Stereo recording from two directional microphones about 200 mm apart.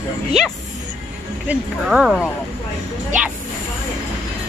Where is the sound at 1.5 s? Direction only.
5° right (ahead or behind).